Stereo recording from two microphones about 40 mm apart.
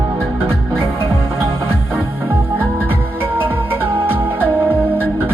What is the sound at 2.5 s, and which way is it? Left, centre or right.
Music, right.